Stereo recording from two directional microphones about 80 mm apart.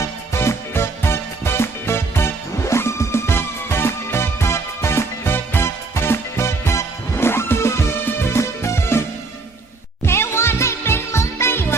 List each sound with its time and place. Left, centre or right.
0.0 s music: left
10.1 s music: left